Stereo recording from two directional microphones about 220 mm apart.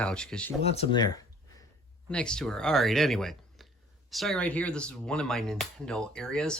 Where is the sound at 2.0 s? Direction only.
5° left (ahead or behind).